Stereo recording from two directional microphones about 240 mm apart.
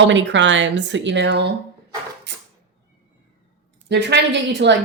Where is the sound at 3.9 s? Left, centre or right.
Right.